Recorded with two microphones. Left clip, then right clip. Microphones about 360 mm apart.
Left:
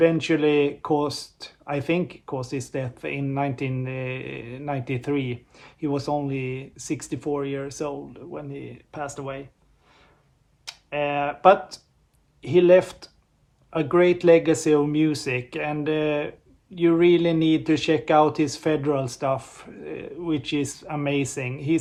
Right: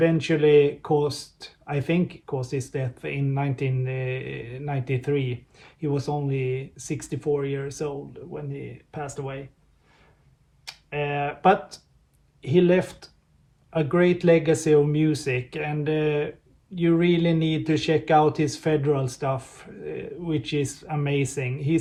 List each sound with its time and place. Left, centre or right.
0.0 s speech: centre
10.7 s speech: centre